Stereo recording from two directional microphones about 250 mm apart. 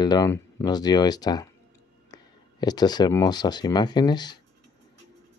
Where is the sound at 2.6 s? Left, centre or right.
Centre.